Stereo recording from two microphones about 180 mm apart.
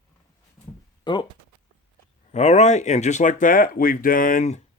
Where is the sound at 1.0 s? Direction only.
25° left (ahead or behind).